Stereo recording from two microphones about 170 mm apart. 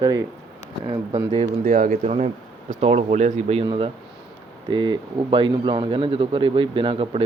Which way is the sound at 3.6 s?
30° right (ahead or behind).